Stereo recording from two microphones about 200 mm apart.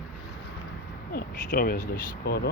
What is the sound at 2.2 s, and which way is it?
Speech, 55° left (ahead or behind).